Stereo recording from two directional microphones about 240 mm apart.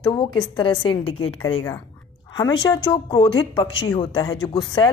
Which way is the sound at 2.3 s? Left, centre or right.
Centre.